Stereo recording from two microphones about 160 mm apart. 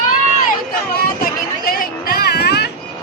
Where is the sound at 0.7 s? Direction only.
65° left (ahead or behind); by 2.6 s 90° left.